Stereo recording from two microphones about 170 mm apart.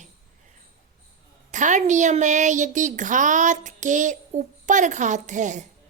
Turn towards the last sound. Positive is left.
turn(degrees=-45)  # may be behind; listen again after turning